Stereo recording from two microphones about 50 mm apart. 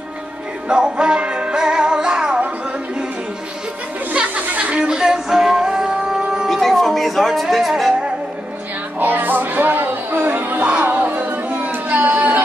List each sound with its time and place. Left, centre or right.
0.7 s music: centre
4.1 s music: right
4.8 s music: centre
6.5 s music: centre
9.0 s music: right
10.8 s a sound: right